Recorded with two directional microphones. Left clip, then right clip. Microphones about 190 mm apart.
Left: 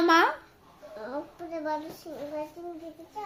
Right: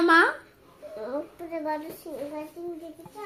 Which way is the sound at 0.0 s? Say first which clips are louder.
Right 2 dB; 20° left (ahead or behind).